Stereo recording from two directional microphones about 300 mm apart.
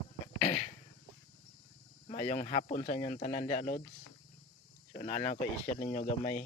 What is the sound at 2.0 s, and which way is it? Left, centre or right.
Speech, left.